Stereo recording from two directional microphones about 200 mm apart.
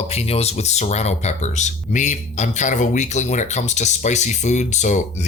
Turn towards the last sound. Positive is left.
turn(degrees=35)  # may be behind; listen again after turning